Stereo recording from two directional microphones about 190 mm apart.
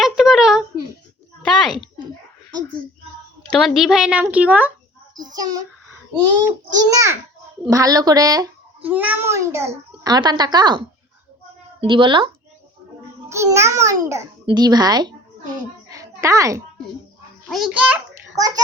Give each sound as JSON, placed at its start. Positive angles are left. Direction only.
{"t": 0.0, "sound": "a sound", "side_deg": 0}
{"t": 3.5, "sound": "a woman's voice", "side_deg": 0}
{"t": 5.1, "sound": "child singing", "side_deg": -20}
{"t": 6.7, "sound": "a child's voice", "side_deg": -15}
{"t": 8.9, "sound": "a child's voice", "side_deg": -10}
{"t": 13.2, "sound": "a child's voice", "side_deg": -15}
{"t": 15.9, "sound": "a sound", "side_deg": -15}
{"t": 17.5, "sound": "a woman's voice", "side_deg": -5}
{"t": 18.3, "sound": "speech", "side_deg": -20}